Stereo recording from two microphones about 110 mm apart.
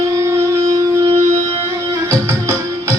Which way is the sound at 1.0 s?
60° right (ahead or behind).